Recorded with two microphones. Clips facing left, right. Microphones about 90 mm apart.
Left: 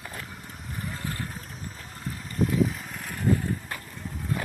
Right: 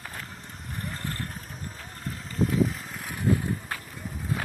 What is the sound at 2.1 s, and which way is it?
Vehicle, centre (ahead or behind).